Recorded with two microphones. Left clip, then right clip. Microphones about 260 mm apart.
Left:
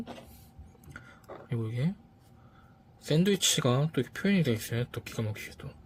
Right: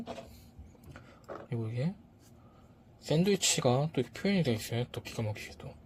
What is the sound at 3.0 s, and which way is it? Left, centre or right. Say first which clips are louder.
Speech: left 2 dB; left.